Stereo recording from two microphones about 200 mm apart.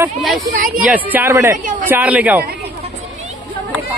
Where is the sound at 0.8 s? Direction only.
10° right (ahead or behind).